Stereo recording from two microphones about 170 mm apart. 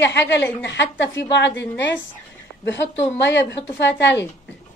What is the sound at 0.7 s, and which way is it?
Speech, 90° left.